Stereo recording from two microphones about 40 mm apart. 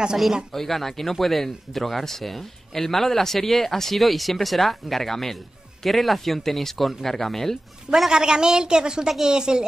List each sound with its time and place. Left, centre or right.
0.5 s a man's voice: centre
8.1 s a woman's voice: centre